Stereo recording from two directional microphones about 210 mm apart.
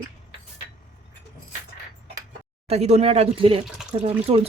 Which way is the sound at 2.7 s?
30° right (ahead or behind).